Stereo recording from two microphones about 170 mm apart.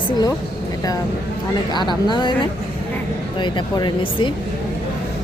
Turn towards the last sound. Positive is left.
turn(degrees=30)  # may be behind; listen again after turning